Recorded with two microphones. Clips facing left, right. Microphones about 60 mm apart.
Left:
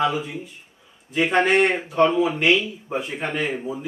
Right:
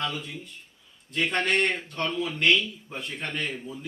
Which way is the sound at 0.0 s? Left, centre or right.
Centre.